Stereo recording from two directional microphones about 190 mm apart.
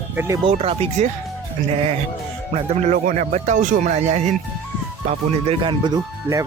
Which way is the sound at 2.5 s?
35° right (ahead or behind).